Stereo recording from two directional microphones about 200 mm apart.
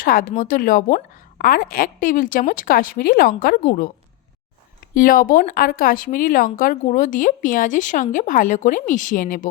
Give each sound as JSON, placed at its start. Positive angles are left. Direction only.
{"t": 0.0, "sound": "a woman's voice", "side_deg": 45}
{"t": 4.9, "sound": "speech", "side_deg": 45}